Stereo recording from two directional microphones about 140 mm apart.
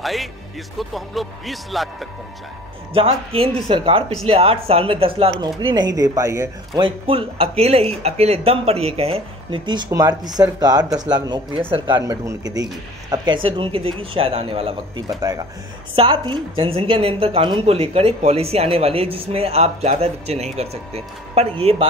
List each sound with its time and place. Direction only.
0.0 s speech: centre (ahead or behind)
2.9 s a woman's voice: 45° right (ahead or behind)
5.8 s speech: 25° right (ahead or behind)
6.8 s a woman's voice: 40° right (ahead or behind)
15.0 s speech: 25° right (ahead or behind)
16.0 s a woman's voice: 40° right (ahead or behind)